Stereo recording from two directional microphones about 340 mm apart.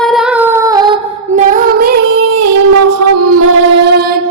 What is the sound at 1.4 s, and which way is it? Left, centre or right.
Female singing, right.